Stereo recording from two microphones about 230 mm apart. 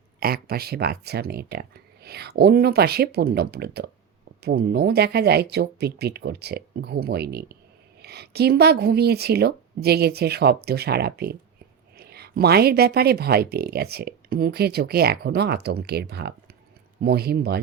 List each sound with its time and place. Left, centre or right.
0.2 s speech: right